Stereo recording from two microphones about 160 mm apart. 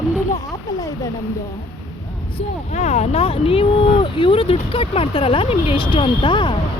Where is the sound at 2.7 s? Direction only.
40° left (ahead or behind).